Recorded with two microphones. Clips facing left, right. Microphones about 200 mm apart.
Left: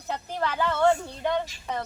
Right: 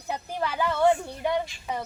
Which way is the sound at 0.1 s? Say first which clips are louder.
Even; 10° right (ahead or behind).